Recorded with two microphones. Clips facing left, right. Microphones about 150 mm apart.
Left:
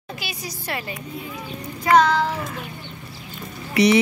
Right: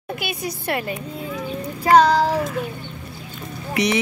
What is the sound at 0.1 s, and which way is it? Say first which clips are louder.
Speech: right 6 dB; 55° right (ahead or behind).